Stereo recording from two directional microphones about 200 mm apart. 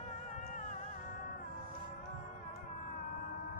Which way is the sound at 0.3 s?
40° left (ahead or behind).